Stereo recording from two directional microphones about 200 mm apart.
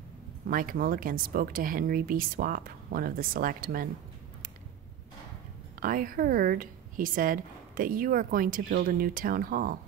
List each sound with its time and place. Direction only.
0.5 s a woman's voice: 45° right (ahead or behind)
5.8 s a woman's voice: 45° right (ahead or behind)